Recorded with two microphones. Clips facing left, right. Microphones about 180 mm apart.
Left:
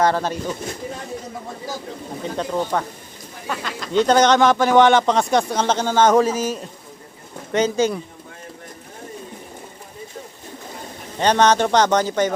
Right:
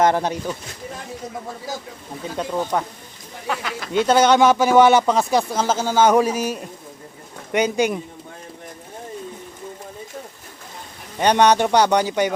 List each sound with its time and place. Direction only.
0.0 s speech: 15° right (ahead or behind)
2.4 s speech: 10° right (ahead or behind)
11.2 s speech: 15° right (ahead or behind)